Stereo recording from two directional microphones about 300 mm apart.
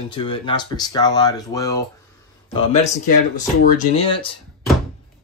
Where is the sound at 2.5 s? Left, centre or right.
Left.